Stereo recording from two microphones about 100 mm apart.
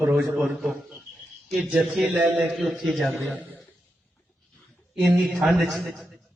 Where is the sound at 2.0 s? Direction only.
10° right (ahead or behind).